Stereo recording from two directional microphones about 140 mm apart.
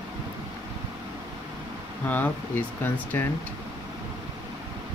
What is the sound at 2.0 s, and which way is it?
Speech, 10° left (ahead or behind).